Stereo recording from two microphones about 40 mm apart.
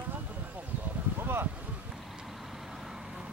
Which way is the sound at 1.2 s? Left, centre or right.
Right.